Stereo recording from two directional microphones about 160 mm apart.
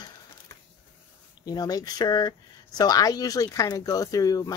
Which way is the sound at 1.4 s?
25° left (ahead or behind).